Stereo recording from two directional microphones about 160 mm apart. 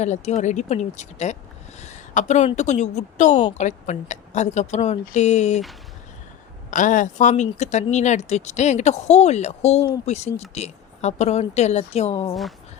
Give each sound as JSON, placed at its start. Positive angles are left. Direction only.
{"t": 0.0, "sound": "speech", "side_deg": 45}
{"t": 6.7, "sound": "speech", "side_deg": 50}